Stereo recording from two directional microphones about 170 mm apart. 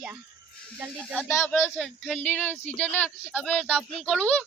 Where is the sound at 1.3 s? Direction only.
15° left (ahead or behind).